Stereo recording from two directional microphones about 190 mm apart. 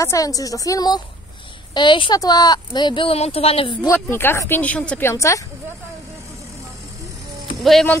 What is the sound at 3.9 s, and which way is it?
Speech, 10° left (ahead or behind).